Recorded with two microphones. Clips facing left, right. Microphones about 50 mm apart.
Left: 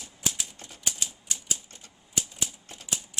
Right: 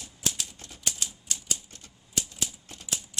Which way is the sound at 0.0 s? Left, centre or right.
Centre.